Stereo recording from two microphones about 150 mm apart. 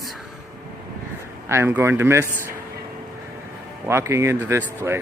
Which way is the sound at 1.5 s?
15° right (ahead or behind).